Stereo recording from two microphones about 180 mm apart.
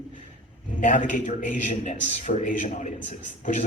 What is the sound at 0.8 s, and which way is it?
A man's voice, 45° left (ahead or behind).